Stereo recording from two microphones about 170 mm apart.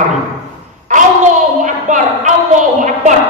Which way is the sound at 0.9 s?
45° right (ahead or behind).